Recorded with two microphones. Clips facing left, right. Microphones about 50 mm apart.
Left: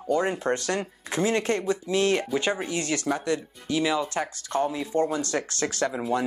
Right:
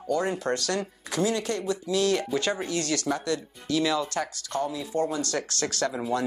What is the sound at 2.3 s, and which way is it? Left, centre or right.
Speech, centre.